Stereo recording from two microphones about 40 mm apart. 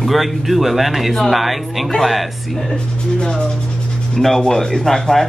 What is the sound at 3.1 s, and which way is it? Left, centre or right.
Speech, left.